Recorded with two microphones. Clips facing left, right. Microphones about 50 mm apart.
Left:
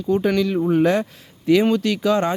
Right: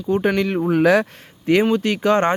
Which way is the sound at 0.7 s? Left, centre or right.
Right.